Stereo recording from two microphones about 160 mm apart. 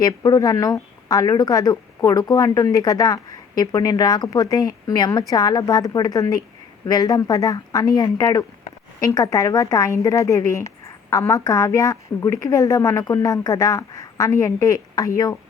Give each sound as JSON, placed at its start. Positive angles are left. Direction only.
{"t": 0.0, "sound": "a woman's voice", "side_deg": 20}